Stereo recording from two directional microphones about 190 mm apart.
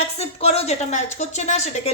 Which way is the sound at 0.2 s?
30° left (ahead or behind).